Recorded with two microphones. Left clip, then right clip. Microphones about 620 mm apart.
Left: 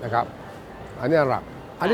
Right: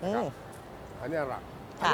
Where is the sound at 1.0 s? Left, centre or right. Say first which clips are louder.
Left 13 dB; left.